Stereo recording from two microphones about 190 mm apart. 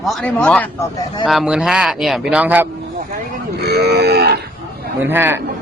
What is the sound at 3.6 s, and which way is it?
Livestock, 60° right (ahead or behind).